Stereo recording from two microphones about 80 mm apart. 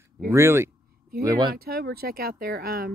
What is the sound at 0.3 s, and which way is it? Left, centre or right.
Speech, right.